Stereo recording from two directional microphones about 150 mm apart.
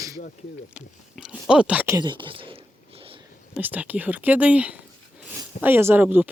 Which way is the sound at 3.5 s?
10° right (ahead or behind).